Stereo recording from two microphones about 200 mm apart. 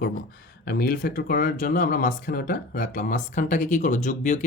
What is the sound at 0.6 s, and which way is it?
Speech, 50° left (ahead or behind).